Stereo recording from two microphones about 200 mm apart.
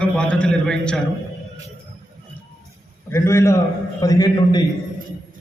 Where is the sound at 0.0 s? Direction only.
5° left (ahead or behind).